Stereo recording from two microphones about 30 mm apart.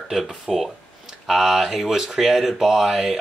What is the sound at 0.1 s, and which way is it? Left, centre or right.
Speech, centre.